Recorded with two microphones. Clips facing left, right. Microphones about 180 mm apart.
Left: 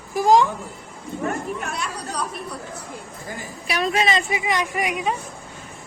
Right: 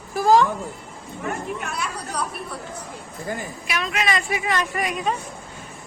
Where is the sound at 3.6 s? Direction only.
35° left (ahead or behind); by 5.2 s 10° left (ahead or behind).